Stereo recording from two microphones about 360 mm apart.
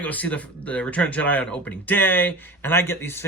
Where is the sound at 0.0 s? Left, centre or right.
Centre.